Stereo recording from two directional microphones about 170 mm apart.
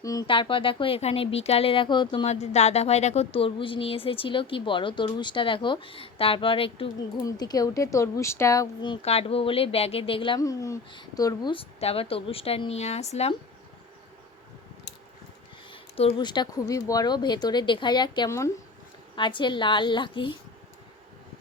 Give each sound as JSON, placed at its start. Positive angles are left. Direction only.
{"t": 0.0, "sound": "speech", "side_deg": 20}
{"t": 0.3, "sound": "speech", "side_deg": 30}
{"t": 2.2, "sound": "speech", "side_deg": 40}
{"t": 9.0, "sound": "speech", "side_deg": 35}
{"t": 15.7, "sound": "speech", "side_deg": 30}
{"t": 19.1, "sound": "speech", "side_deg": 30}